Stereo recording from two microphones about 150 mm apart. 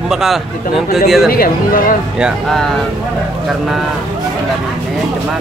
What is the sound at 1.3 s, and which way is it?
Speech, 75° left (ahead or behind).